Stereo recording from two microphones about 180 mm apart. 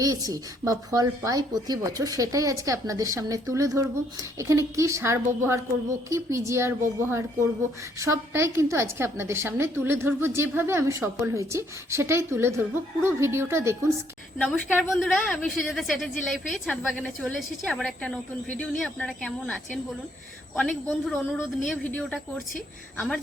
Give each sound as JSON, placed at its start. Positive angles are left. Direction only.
{"t": 0.0, "sound": "a woman's voice", "side_deg": -20}
{"t": 14.3, "sound": "a woman's voice", "side_deg": 5}